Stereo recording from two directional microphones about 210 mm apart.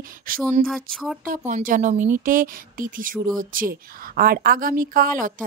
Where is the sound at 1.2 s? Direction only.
40° right (ahead or behind).